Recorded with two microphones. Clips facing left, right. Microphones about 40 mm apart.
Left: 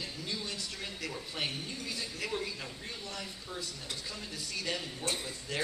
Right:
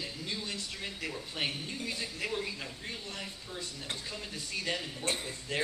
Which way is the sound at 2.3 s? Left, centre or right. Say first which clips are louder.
Right 1 dB; centre.